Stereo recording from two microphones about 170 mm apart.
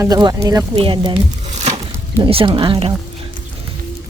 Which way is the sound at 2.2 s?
30° right (ahead or behind).